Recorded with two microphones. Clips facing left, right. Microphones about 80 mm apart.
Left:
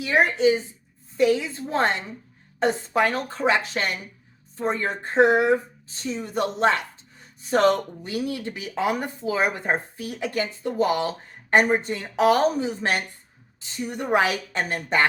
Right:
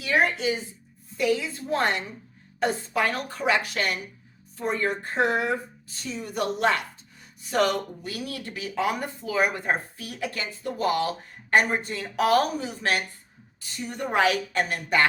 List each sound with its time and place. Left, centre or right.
0.0 s speech: left